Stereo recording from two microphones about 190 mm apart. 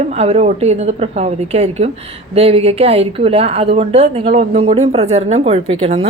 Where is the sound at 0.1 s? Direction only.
30° right (ahead or behind).